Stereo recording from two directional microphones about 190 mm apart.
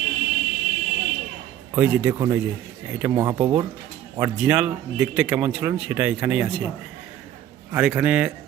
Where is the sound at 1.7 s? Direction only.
10° right (ahead or behind).